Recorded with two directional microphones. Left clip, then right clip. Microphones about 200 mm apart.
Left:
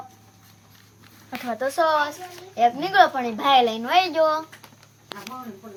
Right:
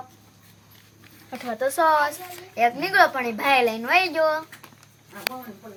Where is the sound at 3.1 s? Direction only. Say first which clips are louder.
Left 2 dB; 15° right (ahead or behind).